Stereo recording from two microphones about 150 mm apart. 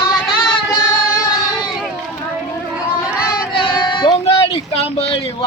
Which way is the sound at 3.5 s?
35° left (ahead or behind).